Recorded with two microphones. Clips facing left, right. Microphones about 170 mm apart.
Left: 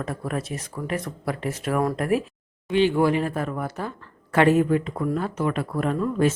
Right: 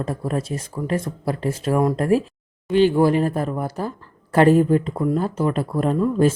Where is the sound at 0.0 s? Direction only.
30° right (ahead or behind).